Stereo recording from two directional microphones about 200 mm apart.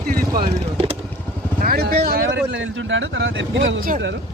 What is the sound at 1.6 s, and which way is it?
Speech, 45° right (ahead or behind).